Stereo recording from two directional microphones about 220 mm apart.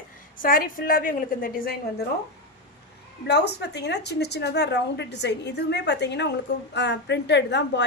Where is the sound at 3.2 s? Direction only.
50° left (ahead or behind).